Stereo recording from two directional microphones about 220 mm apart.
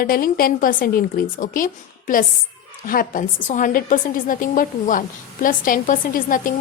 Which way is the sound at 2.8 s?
40° left (ahead or behind).